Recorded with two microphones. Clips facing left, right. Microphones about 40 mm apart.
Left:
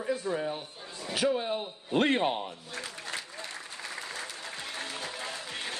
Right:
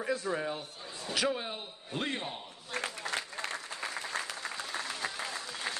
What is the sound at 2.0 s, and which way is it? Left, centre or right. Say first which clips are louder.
Speech: left 10 dB; left.